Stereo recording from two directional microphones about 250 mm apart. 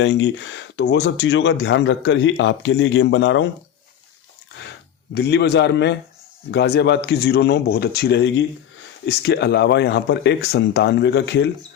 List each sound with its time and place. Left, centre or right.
0.0 s speech: left
4.6 s speech: left